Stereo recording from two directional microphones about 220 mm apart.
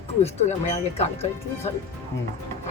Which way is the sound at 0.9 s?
30° left (ahead or behind).